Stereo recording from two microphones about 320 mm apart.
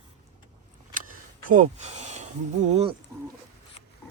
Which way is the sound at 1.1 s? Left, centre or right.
Right.